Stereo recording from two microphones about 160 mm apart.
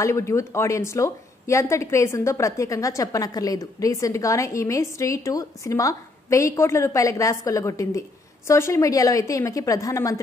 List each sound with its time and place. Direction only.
0.0 s a woman's voice: 20° left (ahead or behind)